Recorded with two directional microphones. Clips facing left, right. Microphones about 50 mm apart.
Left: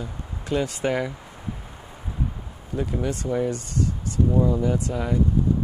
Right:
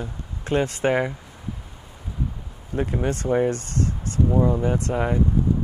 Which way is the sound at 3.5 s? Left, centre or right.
Right.